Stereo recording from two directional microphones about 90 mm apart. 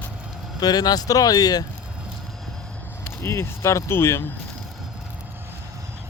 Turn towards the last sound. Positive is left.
turn(degrees=30)  # may be behind; listen again after turning